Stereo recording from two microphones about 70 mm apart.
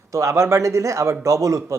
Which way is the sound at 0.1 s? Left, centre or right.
Right.